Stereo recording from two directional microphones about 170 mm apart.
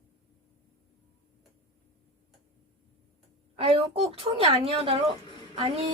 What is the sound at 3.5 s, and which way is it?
A woman's voice, 35° right (ahead or behind).